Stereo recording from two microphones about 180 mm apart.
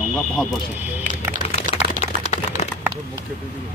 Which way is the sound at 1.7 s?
35° left (ahead or behind).